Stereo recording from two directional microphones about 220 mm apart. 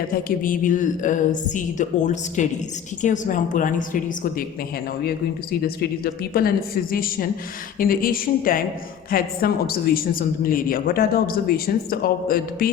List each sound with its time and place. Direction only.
0.3 s a woman's voice: 40° left (ahead or behind)